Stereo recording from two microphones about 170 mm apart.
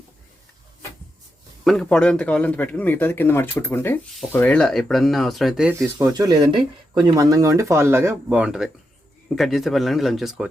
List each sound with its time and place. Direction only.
1.6 s a man's voice: 5° left (ahead or behind)
6.1 s speech: 25° right (ahead or behind); by 10.5 s centre (ahead or behind)